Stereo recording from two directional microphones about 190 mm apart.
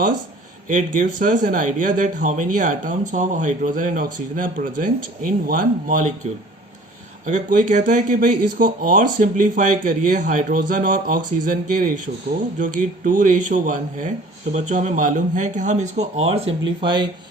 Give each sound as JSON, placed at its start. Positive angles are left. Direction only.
{"t": 0.7, "sound": "speech", "side_deg": -40}
{"t": 7.3, "sound": "speech", "side_deg": -40}